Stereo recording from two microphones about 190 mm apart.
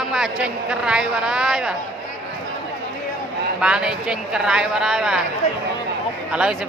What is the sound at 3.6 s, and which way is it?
Speech, 5° right (ahead or behind).